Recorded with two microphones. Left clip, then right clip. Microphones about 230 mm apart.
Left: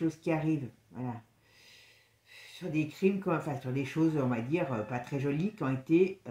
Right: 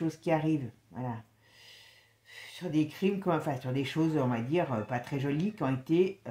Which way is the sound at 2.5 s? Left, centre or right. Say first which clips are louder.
Right 3 dB; right.